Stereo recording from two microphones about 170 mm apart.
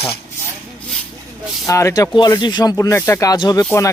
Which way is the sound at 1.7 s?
20° left (ahead or behind).